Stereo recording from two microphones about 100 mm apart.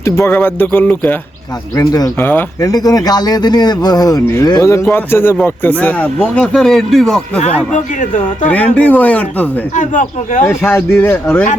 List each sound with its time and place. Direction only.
0.3 s speech: 20° left (ahead or behind)
1.7 s speech: 40° left (ahead or behind)
2.1 s speech: 20° left (ahead or behind)
2.6 s speech: 40° left (ahead or behind); by 7.2 s 5° left (ahead or behind)
8.4 s speech: 15° left (ahead or behind)